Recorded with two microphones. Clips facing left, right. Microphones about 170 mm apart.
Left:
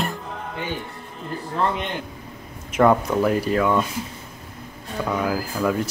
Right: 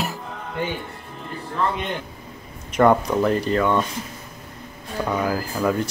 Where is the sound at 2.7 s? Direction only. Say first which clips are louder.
Right 1 dB; centre (ahead or behind).